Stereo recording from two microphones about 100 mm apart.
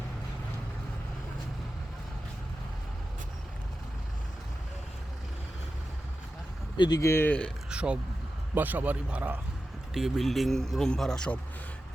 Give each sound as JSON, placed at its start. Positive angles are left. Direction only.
{"t": 6.7, "sound": "speech", "side_deg": 45}
{"t": 7.0, "sound": "speech", "side_deg": 25}
{"t": 7.3, "sound": "speech", "side_deg": 10}
{"t": 7.7, "sound": "a man's voice", "side_deg": -10}
{"t": 9.9, "sound": "speech", "side_deg": 0}